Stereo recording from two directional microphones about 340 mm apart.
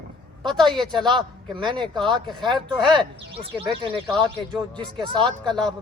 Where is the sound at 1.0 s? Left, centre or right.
Centre.